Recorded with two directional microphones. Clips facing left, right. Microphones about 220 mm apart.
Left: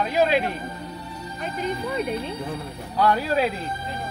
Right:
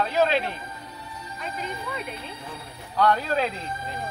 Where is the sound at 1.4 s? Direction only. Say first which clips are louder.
Left 6 dB; 40° left (ahead or behind).